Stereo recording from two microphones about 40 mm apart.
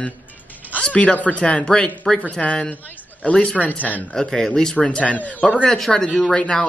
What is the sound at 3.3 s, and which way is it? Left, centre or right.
Speech, left.